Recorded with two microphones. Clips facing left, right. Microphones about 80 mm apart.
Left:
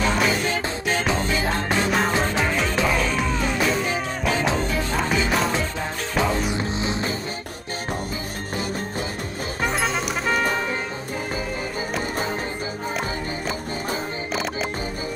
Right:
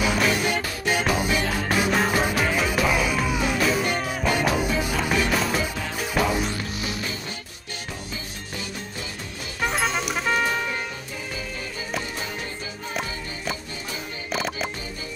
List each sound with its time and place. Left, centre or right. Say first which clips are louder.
0.0 s music: left 1 dB; centre
6.5 s music: left 5 dB; left
9.6 s music: even; centre
14.3 s music: even; centre